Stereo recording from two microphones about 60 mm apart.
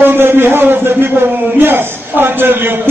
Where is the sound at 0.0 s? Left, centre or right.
Right.